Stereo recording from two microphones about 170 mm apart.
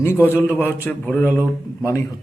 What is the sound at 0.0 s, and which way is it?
Speech, 15° left (ahead or behind).